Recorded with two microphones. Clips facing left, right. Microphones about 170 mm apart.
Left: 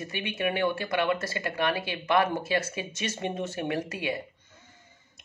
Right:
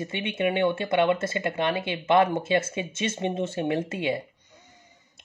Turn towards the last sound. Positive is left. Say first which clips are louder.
# right 4 dB
turn(degrees=-25)  # may be behind; listen again after turning